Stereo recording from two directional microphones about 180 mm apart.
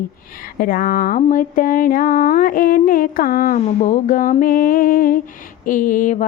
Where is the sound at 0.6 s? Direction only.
50° left (ahead or behind).